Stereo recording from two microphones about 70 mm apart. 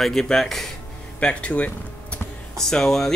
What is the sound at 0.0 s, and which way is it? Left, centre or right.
Speech, centre.